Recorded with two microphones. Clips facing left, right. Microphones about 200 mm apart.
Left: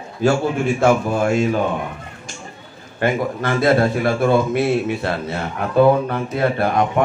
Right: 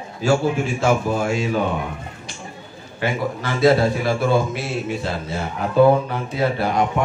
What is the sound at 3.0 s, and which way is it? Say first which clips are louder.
A man's voice: left 4 dB; 55° left (ahead or behind).